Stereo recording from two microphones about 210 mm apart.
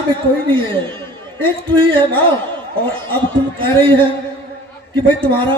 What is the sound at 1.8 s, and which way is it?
Speech, 25° right (ahead or behind).